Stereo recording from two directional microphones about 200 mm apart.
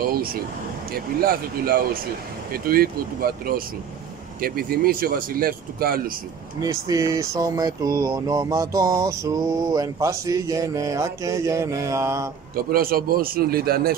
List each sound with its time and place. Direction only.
0.0 s speech: 50° right (ahead or behind)
6.6 s speech: 15° right (ahead or behind)
12.5 s speech: 45° right (ahead or behind)